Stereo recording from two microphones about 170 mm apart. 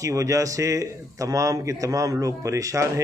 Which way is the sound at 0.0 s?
20° right (ahead or behind).